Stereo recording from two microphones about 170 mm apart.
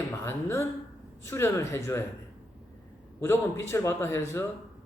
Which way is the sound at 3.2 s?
15° left (ahead or behind).